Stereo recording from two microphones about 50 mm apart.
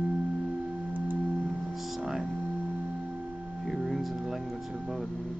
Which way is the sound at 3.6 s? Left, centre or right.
Centre.